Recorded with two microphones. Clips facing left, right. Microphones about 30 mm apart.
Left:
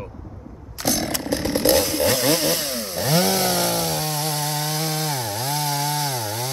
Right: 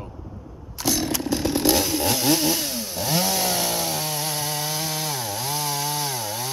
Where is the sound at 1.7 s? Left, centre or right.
Centre.